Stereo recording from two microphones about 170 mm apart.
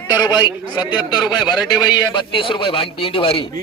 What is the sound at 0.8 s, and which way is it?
A man's voice, 25° left (ahead or behind).